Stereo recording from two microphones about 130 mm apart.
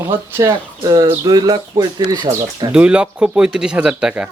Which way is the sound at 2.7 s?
10° right (ahead or behind).